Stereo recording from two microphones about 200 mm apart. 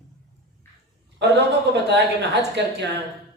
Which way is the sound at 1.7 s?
60° right (ahead or behind).